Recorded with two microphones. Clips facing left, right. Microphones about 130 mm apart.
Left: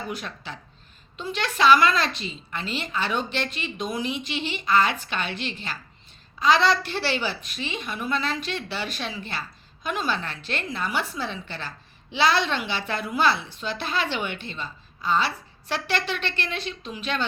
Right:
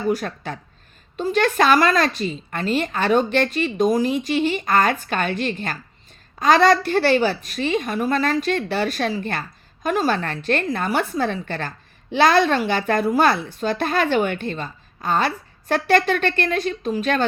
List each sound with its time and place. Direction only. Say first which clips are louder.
0.1 s a woman's voice: right 10 dB; 45° right (ahead or behind)